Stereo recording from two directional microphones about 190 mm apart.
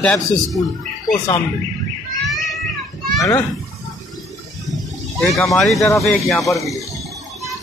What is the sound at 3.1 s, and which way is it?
Speech, 20° left (ahead or behind).